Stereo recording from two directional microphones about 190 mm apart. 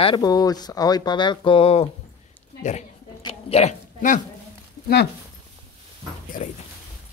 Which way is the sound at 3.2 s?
30° left (ahead or behind).